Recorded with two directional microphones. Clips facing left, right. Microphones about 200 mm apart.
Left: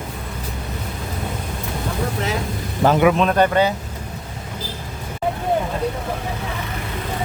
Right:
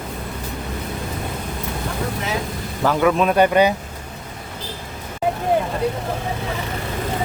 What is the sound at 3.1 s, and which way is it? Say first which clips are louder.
Speech: right 1 dB; 10° right (ahead or behind).